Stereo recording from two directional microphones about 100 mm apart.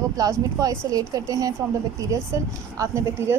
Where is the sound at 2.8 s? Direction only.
30° right (ahead or behind).